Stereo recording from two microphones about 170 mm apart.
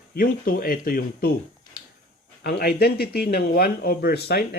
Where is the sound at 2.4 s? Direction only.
65° left (ahead or behind).